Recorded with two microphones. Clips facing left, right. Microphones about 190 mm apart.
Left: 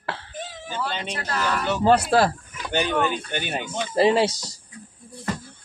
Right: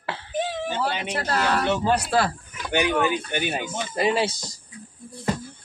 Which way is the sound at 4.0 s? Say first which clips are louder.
Left 4 dB; 30° left (ahead or behind).